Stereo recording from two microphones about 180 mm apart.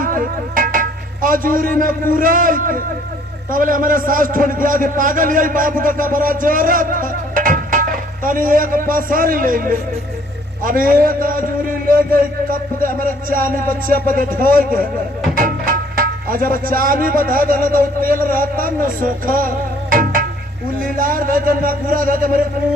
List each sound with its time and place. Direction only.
0.0 s a sound: 50° right (ahead or behind)
1.8 s a man's voice: 50° right (ahead or behind)
18.3 s music: 50° right (ahead or behind)
20.7 s a man's voice: 50° right (ahead or behind)